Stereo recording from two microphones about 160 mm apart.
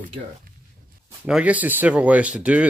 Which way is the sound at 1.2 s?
5° right (ahead or behind).